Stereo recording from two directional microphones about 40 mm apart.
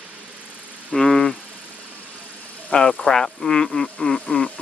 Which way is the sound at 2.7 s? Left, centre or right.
Left.